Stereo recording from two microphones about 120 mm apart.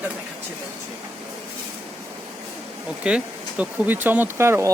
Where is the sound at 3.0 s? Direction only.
10° right (ahead or behind).